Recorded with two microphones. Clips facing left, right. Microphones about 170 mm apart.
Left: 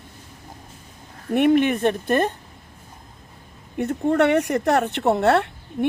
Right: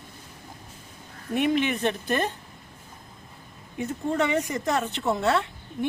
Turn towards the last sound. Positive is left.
turn(degrees=60)  # may be behind; listen again after turning